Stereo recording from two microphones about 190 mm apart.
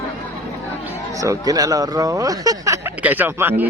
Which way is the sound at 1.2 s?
20° right (ahead or behind).